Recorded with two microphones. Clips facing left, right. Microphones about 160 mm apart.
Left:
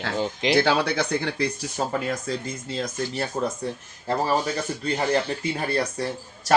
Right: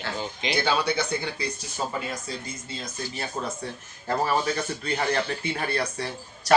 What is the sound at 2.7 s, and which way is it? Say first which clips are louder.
Speech: left 7 dB; 90° left.